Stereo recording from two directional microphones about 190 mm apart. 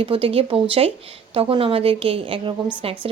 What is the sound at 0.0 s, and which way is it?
Speech, 30° right (ahead or behind).